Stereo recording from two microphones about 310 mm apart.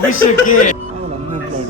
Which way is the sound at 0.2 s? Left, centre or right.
Left.